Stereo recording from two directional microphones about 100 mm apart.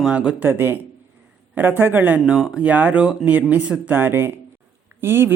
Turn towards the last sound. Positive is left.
turn(degrees=-25)  # may be behind; listen again after turning